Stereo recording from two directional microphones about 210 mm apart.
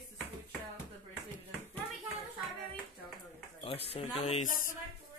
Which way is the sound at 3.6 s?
30° left (ahead or behind).